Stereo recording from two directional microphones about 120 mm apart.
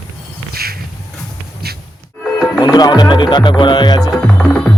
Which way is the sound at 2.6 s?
35° left (ahead or behind).